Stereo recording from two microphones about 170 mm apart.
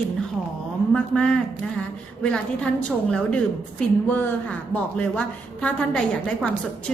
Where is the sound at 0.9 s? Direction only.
5° left (ahead or behind).